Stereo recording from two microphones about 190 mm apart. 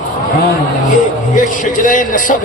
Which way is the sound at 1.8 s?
45° left (ahead or behind).